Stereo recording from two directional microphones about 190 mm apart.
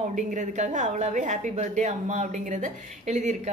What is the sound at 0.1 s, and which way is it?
A woman's voice, 40° right (ahead or behind).